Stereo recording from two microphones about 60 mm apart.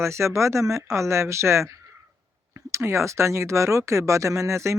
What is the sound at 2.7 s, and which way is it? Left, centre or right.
Speech, right.